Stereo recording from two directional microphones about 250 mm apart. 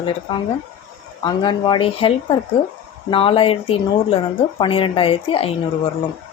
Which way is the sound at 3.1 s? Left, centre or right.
Left.